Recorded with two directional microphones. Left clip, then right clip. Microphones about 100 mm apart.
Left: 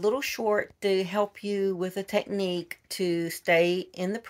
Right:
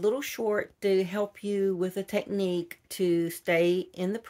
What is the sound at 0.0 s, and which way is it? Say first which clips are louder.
Speech: left 1 dB; 35° right (ahead or behind).